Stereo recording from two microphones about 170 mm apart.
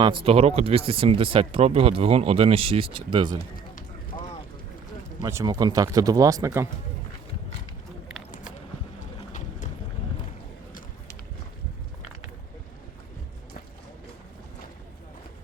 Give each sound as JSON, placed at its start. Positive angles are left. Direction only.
{"t": 0.0, "sound": "speech", "side_deg": -30}
{"t": 5.2, "sound": "speech", "side_deg": -20}